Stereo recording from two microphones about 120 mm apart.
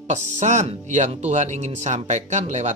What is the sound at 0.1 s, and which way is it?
Speech, 80° right.